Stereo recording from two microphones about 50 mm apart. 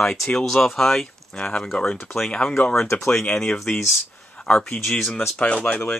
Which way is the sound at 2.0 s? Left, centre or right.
Centre.